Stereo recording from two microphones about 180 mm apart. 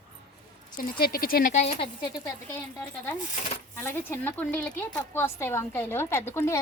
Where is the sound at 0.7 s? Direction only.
50° left (ahead or behind).